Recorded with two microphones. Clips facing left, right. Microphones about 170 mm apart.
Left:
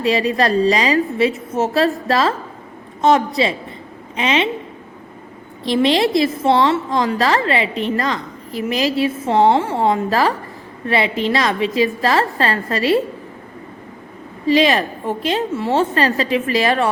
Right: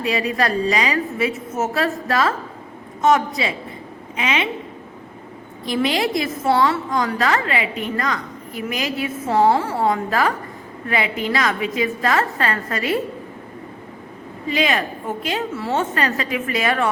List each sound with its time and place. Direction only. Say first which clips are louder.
0.0 s a woman's voice: left 4 dB; 30° left (ahead or behind)
5.6 s a woman's voice: left 5 dB; 30° left (ahead or behind)
14.4 s a woman's voice: left 6 dB; 30° left (ahead or behind)